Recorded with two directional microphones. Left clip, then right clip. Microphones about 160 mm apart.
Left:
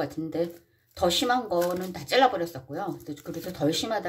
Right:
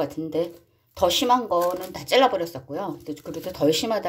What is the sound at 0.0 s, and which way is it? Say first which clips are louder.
Speech: right 4 dB; 20° right (ahead or behind).